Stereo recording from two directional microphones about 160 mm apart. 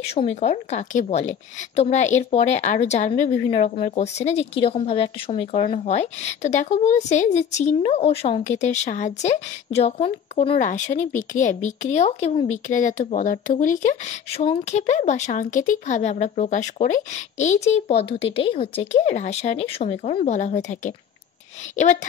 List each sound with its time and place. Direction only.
0.0 s speech: 40° left (ahead or behind)
10.6 s speech: 55° left (ahead or behind)